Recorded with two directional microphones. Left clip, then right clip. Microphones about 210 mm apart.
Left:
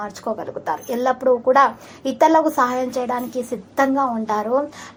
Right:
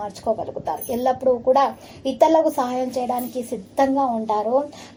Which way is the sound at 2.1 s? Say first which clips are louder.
Left 1 dB; 20° left (ahead or behind).